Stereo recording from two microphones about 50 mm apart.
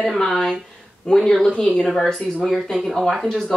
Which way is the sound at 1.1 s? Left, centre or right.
Centre.